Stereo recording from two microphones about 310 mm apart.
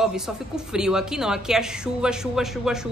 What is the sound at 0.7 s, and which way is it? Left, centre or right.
Speech, centre.